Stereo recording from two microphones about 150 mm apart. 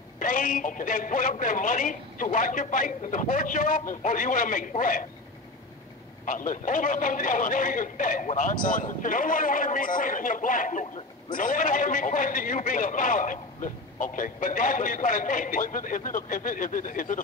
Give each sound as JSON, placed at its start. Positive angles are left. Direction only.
{"t": 0.2, "sound": "a man's voice", "side_deg": 60}
{"t": 6.2, "sound": "a man's voice", "side_deg": 60}